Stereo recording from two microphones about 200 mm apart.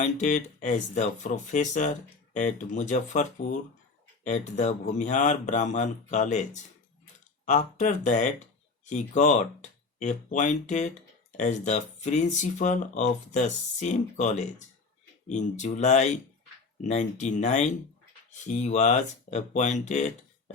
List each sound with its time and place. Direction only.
0.0 s speech: 35° left (ahead or behind)